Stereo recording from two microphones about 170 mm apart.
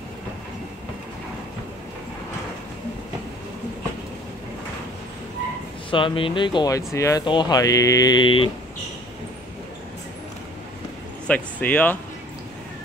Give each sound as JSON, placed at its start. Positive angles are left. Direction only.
{"t": 5.9, "sound": "speech", "side_deg": 30}
{"t": 11.2, "sound": "speech", "side_deg": 10}